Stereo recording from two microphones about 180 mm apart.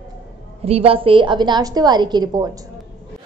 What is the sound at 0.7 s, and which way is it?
A woman's voice, 30° right (ahead or behind).